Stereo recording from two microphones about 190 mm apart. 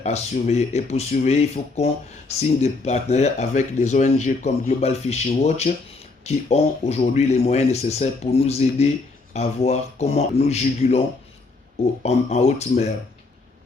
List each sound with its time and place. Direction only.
0.0 s speech: 35° left (ahead or behind)
12.0 s speech: 35° left (ahead or behind)